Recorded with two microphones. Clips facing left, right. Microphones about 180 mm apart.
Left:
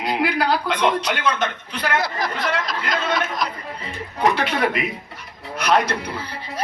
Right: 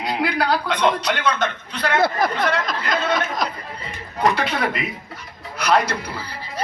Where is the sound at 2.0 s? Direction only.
55° right (ahead or behind).